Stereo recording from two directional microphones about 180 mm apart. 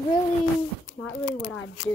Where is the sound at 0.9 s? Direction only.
90° left.